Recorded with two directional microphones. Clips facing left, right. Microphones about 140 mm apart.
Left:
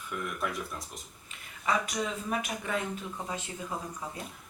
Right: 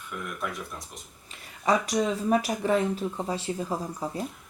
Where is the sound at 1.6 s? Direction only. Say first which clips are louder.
Right 6 dB; 35° right (ahead or behind).